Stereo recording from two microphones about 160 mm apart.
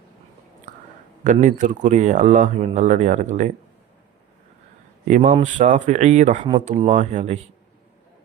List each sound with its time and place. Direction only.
1.2 s speech: 50° right (ahead or behind)
5.0 s speech: 55° right (ahead or behind)